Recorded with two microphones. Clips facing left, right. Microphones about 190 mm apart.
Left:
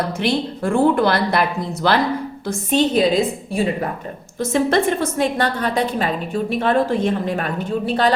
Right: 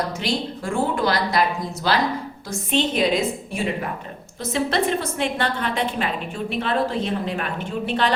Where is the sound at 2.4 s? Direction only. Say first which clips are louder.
Left 5 dB; 40° left (ahead or behind).